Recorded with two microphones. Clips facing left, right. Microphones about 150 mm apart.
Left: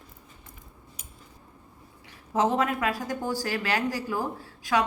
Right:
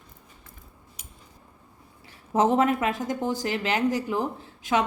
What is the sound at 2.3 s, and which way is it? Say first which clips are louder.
Speech: right 4 dB; 25° right (ahead or behind).